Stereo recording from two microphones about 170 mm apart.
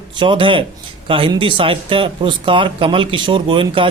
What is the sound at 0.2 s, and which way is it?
Speech, 30° right (ahead or behind).